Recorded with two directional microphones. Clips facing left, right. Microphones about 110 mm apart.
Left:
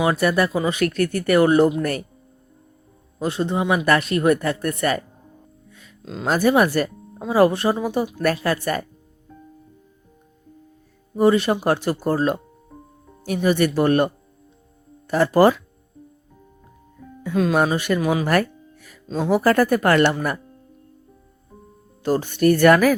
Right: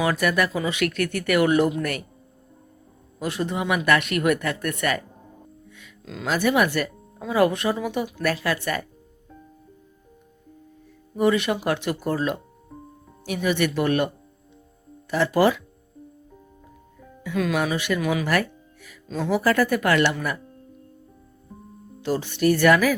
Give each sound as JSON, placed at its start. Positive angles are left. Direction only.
{"t": 0.0, "sound": "speech", "side_deg": 30}
{"t": 3.2, "sound": "speech", "side_deg": 30}
{"t": 6.2, "sound": "speech", "side_deg": 40}
{"t": 11.2, "sound": "speech", "side_deg": 35}
{"t": 12.7, "sound": "music", "side_deg": 0}
{"t": 13.2, "sound": "speech", "side_deg": 40}
{"t": 15.1, "sound": "speech", "side_deg": 45}
{"t": 17.3, "sound": "speech", "side_deg": 30}
{"t": 17.6, "sound": "speech", "side_deg": 45}
{"t": 19.0, "sound": "speech", "side_deg": 30}
{"t": 19.3, "sound": "speech", "side_deg": 45}
{"t": 22.0, "sound": "speech", "side_deg": 45}